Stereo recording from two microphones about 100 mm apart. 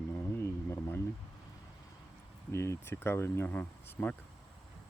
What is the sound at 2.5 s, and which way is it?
Speech, 25° left (ahead or behind).